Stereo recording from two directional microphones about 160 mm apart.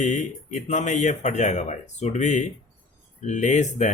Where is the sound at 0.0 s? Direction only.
50° left (ahead or behind).